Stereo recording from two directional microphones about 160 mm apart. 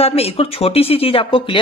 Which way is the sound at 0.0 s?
40° left (ahead or behind).